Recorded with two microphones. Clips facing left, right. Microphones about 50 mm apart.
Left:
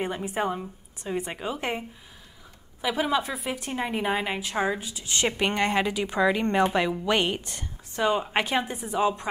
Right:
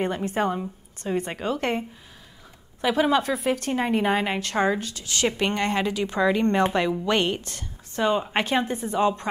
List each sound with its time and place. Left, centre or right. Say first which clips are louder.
0.0 s a woman's voice: right 3 dB; centre
4.8 s speech: right 2 dB; centre
7.4 s a sound: even; left
8.0 s a woman's voice: right 1 dB; centre
8.5 s a woman's voice: right 3 dB; centre
8.9 s speech: right 1 dB; centre